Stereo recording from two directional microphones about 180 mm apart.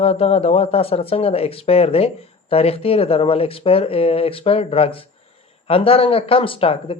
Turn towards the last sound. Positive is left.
turn(degrees=30)  # may be behind; listen again after turning